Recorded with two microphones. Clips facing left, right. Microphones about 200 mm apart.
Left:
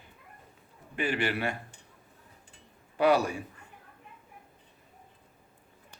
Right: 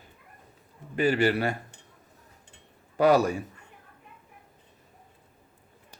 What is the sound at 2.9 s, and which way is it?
Speech, 40° right (ahead or behind).